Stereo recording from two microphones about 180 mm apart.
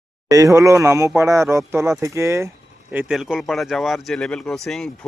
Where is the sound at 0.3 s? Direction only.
20° right (ahead or behind).